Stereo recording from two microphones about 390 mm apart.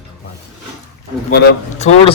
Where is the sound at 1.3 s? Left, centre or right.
Centre.